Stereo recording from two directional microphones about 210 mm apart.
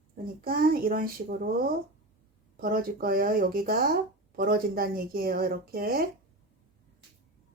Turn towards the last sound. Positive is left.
turn(degrees=-45)  # may be behind; listen again after turning